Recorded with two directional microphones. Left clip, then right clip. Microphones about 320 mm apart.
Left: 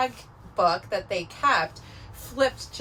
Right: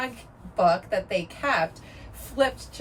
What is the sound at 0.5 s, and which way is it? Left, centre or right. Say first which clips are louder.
Speech: right 1 dB; centre.